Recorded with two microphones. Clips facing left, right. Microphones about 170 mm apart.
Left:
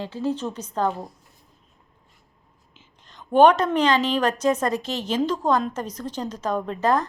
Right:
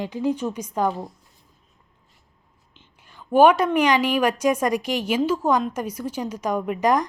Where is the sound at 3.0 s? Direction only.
10° right (ahead or behind).